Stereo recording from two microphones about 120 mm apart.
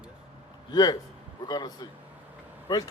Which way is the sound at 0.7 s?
35° left (ahead or behind).